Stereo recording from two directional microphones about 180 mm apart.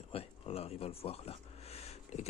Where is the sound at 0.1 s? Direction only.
35° left (ahead or behind).